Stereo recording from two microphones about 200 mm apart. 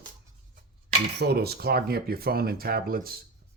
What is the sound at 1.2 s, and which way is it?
Speech, 55° right (ahead or behind).